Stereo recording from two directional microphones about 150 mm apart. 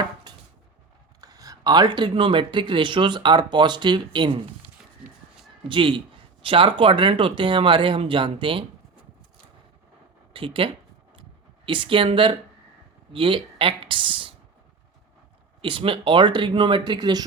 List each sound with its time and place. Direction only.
0.3 s chopping: 25° right (ahead or behind)
1.2 s speech: 25° right (ahead or behind)
5.6 s speech: 35° right (ahead or behind)
10.3 s speech: 35° right (ahead or behind)
15.6 s speech: 35° right (ahead or behind)